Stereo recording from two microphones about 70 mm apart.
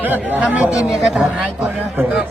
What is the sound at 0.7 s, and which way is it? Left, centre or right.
Speech, centre.